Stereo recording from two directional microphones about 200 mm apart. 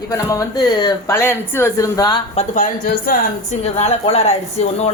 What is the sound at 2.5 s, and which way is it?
Speech, 40° left (ahead or behind).